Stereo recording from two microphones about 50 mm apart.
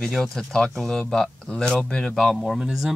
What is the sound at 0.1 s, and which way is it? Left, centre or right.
Speech, centre.